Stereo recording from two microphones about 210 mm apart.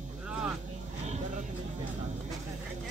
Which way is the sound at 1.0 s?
35° right (ahead or behind).